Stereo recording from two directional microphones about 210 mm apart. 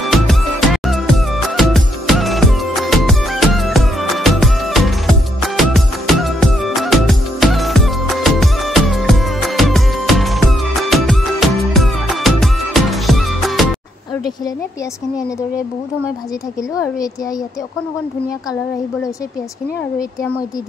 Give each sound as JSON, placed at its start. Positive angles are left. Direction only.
{"t": 0.0, "sound": "music", "side_deg": 0}
{"t": 16.7, "sound": "a woman's voice", "side_deg": 15}